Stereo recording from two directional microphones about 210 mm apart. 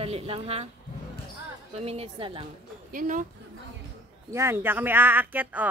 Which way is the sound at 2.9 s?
40° right (ahead or behind).